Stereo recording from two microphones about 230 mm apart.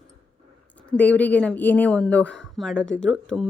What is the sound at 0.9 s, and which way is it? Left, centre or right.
Speech, centre.